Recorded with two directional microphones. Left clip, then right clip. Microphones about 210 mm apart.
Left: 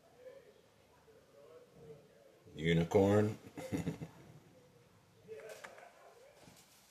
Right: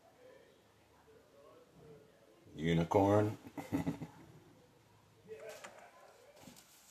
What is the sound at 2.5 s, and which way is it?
Speech, 5° left (ahead or behind).